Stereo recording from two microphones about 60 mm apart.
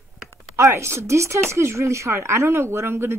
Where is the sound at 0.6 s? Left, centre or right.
Right.